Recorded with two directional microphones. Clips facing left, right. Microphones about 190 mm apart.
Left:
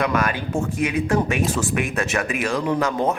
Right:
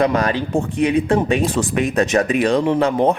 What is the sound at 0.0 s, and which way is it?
Speech, 30° right (ahead or behind).